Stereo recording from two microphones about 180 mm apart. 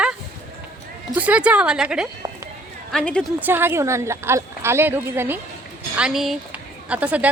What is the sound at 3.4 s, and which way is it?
Speech, 10° right (ahead or behind).